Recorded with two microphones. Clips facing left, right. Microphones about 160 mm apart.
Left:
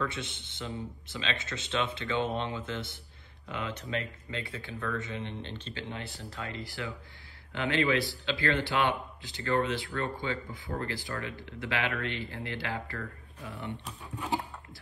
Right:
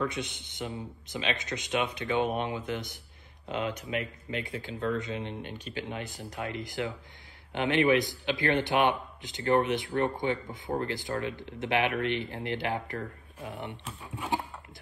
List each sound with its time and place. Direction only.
0.2 s speech: 20° right (ahead or behind)